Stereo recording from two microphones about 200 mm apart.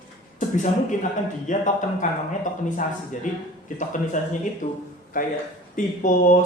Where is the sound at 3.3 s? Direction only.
40° left (ahead or behind).